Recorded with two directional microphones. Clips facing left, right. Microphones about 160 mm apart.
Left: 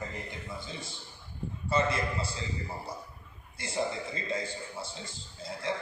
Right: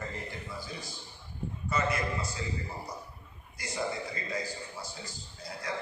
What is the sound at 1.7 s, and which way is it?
Speech, 30° left (ahead or behind).